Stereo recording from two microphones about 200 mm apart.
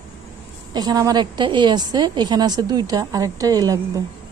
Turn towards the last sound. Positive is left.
turn(degrees=-15)  # may be behind; listen again after turning